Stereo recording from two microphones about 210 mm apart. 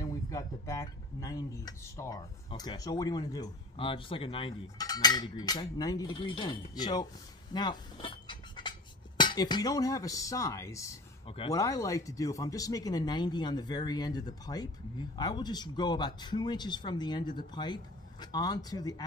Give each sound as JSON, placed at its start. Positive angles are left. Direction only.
{"t": 0.0, "sound": "speech", "side_deg": 15}
{"t": 11.2, "sound": "speech", "side_deg": 25}
{"t": 11.5, "sound": "speech", "side_deg": 15}